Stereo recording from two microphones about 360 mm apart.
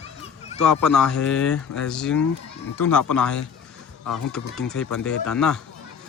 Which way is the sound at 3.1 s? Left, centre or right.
Centre.